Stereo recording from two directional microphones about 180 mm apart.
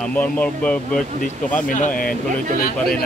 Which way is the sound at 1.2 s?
45° left (ahead or behind).